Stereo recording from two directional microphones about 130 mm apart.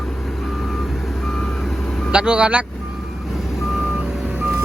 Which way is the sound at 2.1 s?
5° right (ahead or behind).